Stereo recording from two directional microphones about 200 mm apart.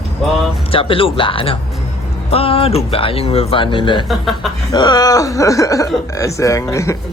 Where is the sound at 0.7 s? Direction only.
25° left (ahead or behind).